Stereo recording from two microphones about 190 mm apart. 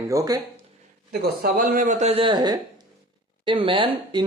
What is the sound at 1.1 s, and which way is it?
Speech, 50° right (ahead or behind).